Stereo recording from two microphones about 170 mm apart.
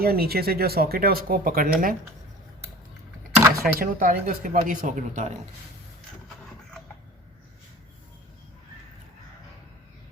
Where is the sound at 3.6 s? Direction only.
55° right (ahead or behind).